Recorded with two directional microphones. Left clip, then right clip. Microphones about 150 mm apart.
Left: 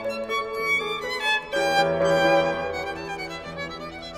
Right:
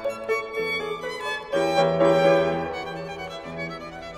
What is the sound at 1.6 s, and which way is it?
Music, 20° left (ahead or behind).